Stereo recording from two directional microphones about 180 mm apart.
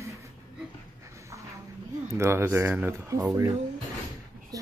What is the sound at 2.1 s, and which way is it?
Speech, 15° right (ahead or behind).